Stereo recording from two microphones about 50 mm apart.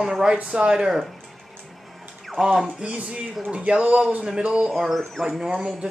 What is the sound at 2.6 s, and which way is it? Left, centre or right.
Speech, right.